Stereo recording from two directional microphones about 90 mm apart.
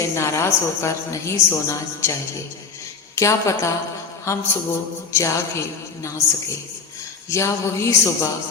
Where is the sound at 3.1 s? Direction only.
35° left (ahead or behind).